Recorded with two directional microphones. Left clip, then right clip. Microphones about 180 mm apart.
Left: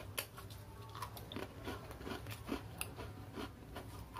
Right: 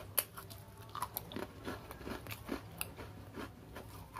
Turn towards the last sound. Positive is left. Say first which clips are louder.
# even
turn(degrees=-5)  # may be behind; listen again after turning